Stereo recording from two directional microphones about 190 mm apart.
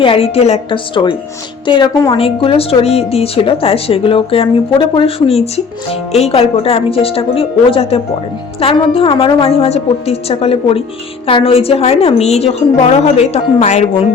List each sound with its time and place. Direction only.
0.0 s a woman's voice: 30° left (ahead or behind)